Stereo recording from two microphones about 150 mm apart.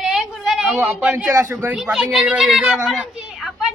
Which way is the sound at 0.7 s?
5° right (ahead or behind).